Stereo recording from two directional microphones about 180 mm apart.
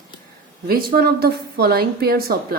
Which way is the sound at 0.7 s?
55° right (ahead or behind).